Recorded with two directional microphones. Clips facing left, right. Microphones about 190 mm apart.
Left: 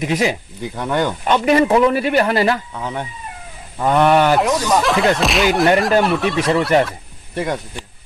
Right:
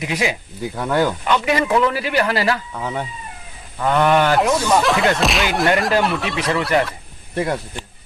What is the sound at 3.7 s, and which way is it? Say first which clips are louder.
Speech: left 2 dB; 20° left (ahead or behind).